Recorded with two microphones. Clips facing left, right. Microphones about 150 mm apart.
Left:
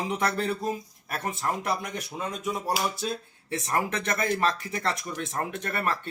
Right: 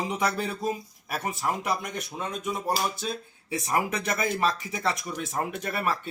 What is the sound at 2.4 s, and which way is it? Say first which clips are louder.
Speech: even; 5° left (ahead or behind).